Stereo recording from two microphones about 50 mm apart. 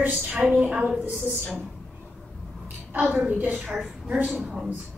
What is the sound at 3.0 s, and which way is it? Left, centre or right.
A woman's voice, right.